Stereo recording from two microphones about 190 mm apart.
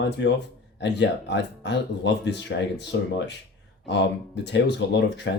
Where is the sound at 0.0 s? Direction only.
70° left (ahead or behind).